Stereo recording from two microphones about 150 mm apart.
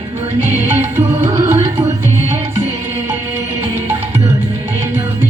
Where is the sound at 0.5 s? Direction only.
15° right (ahead or behind).